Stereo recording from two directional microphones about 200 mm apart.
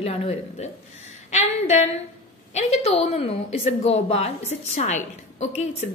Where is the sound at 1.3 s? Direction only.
35° left (ahead or behind).